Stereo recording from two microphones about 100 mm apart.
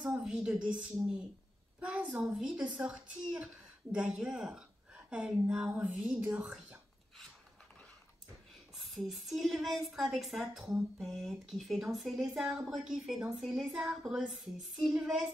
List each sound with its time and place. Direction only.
0.0 s a woman's voice: 10° right (ahead or behind)
0.6 s speech: 50° right (ahead or behind)
1.8 s a woman's voice: 10° right (ahead or behind)
8.7 s a woman's voice: centre (ahead or behind)